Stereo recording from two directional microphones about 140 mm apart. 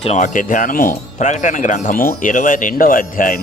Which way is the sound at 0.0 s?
50° left (ahead or behind).